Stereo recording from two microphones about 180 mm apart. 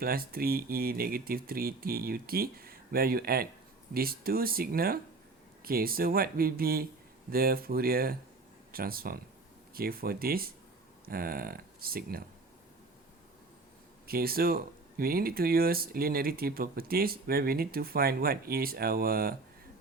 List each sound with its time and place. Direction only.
0.0 s speech: 55° right (ahead or behind)
14.1 s speech: 55° right (ahead or behind)